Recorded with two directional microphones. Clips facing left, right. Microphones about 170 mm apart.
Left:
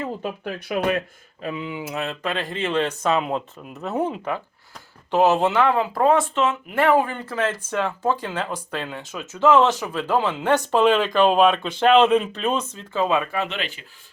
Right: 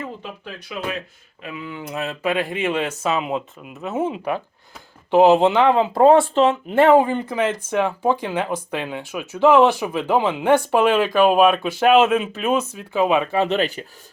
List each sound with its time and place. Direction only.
0.7 s speech: 55° left (ahead or behind)
1.4 s speech: 35° left (ahead or behind)
1.8 s speech: centre (ahead or behind); by 13.3 s 20° right (ahead or behind)
13.3 s speech: 35° right (ahead or behind)